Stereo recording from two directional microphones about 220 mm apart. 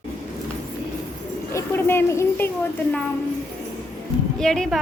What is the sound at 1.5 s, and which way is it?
Speech, 10° left (ahead or behind).